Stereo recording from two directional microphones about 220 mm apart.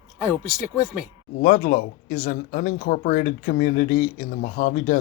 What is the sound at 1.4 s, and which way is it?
Speech, 35° left (ahead or behind).